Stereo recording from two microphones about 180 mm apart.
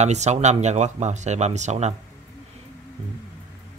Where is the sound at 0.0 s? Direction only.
40° right (ahead or behind).